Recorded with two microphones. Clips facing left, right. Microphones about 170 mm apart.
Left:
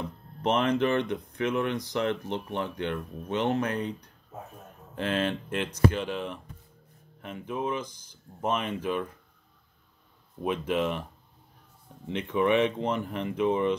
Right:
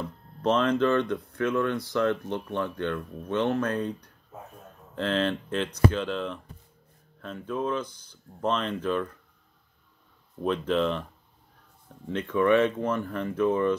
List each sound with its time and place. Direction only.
0.0 s speech: 15° left (ahead or behind)
4.9 s speech: 15° left (ahead or behind)
10.4 s speech: 10° left (ahead or behind)
12.1 s speech: 15° left (ahead or behind)